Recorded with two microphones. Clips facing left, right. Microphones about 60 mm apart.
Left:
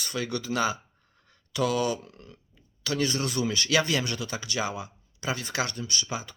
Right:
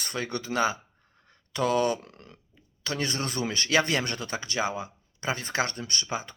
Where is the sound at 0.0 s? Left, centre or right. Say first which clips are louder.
Left 1 dB; right.